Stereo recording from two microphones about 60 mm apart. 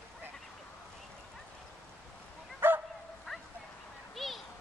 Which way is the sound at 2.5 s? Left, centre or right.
Right.